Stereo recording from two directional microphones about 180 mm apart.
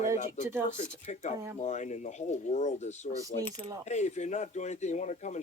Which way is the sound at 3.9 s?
40° left (ahead or behind).